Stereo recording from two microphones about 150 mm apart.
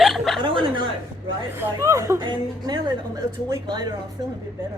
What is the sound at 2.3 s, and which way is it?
Music, 30° right (ahead or behind).